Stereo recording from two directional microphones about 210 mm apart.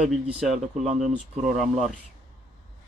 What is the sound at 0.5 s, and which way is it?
Speech, 35° right (ahead or behind).